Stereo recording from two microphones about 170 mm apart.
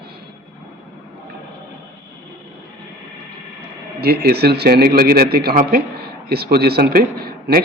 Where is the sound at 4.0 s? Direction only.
65° right (ahead or behind).